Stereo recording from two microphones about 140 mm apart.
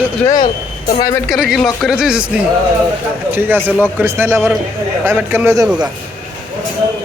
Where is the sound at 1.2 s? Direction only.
Centre (ahead or behind).